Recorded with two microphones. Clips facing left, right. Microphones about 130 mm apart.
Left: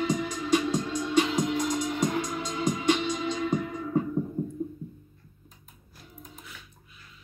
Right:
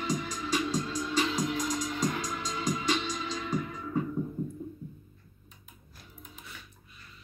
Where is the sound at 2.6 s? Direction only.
55° left (ahead or behind).